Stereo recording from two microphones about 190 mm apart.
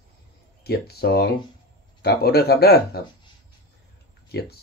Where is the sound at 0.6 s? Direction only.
55° left (ahead or behind).